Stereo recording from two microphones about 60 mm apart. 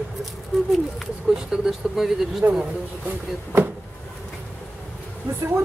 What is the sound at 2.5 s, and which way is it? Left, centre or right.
Speech, centre.